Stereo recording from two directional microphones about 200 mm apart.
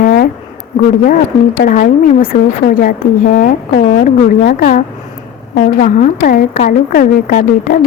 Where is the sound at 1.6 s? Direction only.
40° left (ahead or behind).